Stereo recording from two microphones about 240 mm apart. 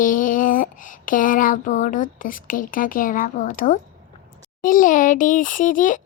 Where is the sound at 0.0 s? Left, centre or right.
Left.